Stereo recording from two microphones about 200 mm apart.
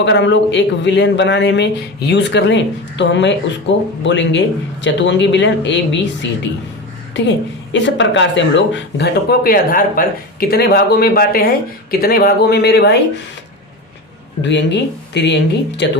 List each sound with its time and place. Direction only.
0.0 s speech: 65° left (ahead or behind)
7.1 s speech: 65° left (ahead or behind)
14.4 s speech: 60° left (ahead or behind)